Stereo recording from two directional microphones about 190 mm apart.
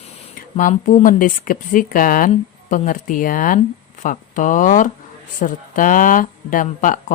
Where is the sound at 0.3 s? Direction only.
45° left (ahead or behind).